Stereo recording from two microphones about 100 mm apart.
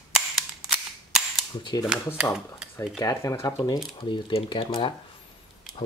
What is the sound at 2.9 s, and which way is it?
Speech, 30° left (ahead or behind).